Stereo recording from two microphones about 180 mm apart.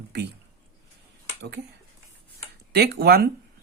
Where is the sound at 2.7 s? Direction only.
60° right (ahead or behind).